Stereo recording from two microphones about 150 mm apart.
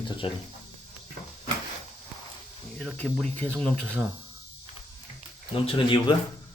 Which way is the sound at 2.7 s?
5° left (ahead or behind).